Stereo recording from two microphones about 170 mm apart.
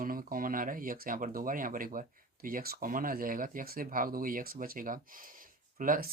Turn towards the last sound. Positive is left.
turn(degrees=-55)  # may be behind; listen again after turning